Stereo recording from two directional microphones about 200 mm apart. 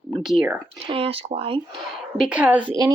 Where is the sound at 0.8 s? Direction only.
25° right (ahead or behind).